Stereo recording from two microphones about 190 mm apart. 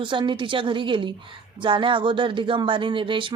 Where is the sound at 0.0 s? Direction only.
25° right (ahead or behind).